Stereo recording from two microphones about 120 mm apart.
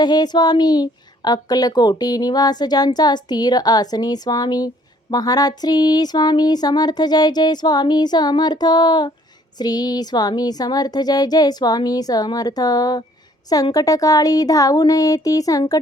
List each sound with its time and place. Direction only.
0.0 s speech: 35° left (ahead or behind)